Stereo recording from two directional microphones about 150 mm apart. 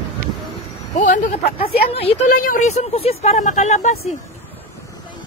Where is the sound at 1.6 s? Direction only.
40° left (ahead or behind).